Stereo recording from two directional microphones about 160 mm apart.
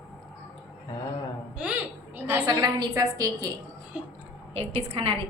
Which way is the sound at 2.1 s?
10° right (ahead or behind).